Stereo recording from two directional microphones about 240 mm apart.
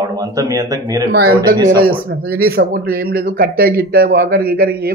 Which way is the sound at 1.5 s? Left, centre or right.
Right.